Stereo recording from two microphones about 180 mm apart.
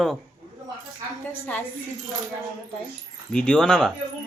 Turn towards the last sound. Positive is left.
turn(degrees=5)  # may be behind; listen again after turning